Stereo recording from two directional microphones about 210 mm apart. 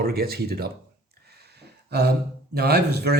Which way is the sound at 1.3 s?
50° right (ahead or behind).